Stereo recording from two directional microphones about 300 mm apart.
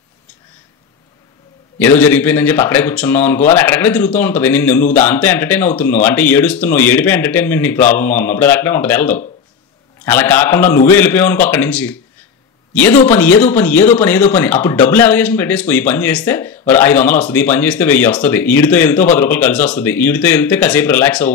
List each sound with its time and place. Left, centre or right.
1.8 s speech: centre